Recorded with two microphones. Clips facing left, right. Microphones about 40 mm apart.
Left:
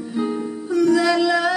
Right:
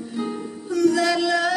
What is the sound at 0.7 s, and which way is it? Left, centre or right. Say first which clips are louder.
Music: left 2 dB; centre.